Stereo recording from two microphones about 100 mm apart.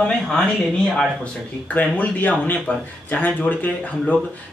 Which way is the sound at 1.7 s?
15° left (ahead or behind).